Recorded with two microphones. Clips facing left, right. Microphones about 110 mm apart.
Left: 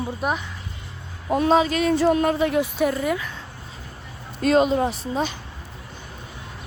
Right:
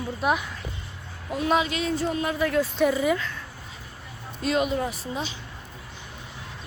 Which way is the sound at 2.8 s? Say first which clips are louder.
Right 3 dB; centre (ahead or behind).